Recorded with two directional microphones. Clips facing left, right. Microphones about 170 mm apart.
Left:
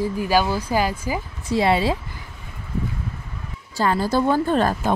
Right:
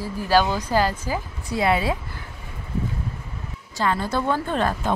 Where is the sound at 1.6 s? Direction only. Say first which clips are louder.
Left 2 dB; 30° left (ahead or behind).